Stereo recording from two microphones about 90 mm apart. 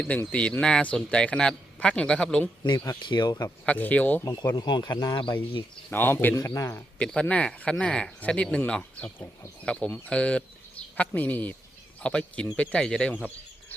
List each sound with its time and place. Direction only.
0.3 s speech: 10° left (ahead or behind)
2.6 s speech: 45° left (ahead or behind)
3.0 s speech: 55° left (ahead or behind)
3.7 s speech: 15° left (ahead or behind)
4.5 s speech: 55° left (ahead or behind)
5.9 s speech: 25° left (ahead or behind)
6.3 s speech: 40° left (ahead or behind)
7.0 s speech: 10° left (ahead or behind)
9.1 s speech: 30° left (ahead or behind)
9.6 s speech: 10° left (ahead or behind)